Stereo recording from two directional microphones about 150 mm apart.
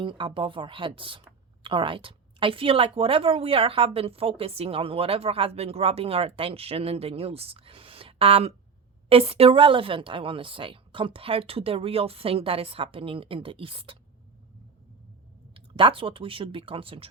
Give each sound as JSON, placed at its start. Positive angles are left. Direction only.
{"t": 0.0, "sound": "speech", "side_deg": -35}
{"t": 15.5, "sound": "speech", "side_deg": -35}